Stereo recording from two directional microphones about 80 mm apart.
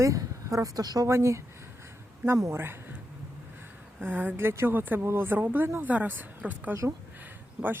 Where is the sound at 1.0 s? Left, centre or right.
Right.